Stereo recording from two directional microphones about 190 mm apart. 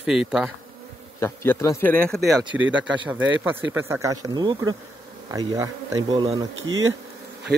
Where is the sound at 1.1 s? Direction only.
15° left (ahead or behind).